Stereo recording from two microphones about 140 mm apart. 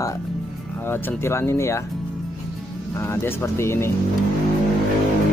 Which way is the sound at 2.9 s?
20° left (ahead or behind).